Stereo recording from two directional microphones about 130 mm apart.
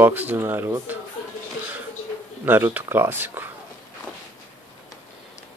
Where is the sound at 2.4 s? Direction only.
15° right (ahead or behind).